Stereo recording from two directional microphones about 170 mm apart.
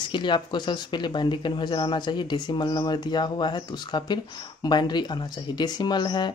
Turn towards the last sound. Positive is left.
turn(degrees=25)  # may be behind; listen again after turning